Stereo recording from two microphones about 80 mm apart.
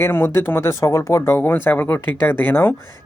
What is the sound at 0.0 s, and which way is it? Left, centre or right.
Speech, left.